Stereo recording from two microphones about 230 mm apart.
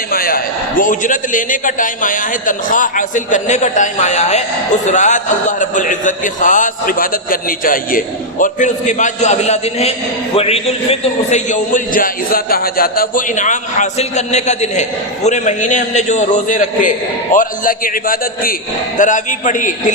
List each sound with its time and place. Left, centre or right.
0.1 s a man's voice: left